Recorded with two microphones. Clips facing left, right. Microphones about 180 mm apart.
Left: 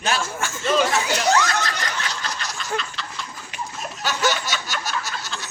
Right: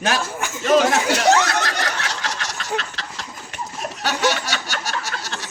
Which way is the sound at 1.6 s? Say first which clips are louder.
Right 3 dB; 70° right (ahead or behind).